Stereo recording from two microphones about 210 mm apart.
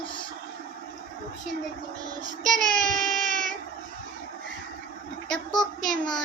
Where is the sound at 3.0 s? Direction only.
35° right (ahead or behind).